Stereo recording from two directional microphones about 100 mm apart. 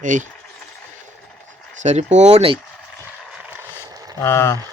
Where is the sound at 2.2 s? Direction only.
90° right.